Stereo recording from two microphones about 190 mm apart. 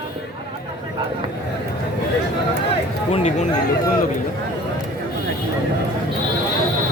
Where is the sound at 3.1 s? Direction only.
30° left (ahead or behind).